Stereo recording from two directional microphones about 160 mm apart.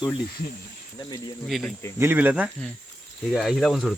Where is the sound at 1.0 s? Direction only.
25° left (ahead or behind).